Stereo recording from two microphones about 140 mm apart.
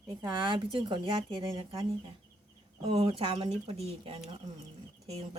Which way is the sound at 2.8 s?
45° right (ahead or behind).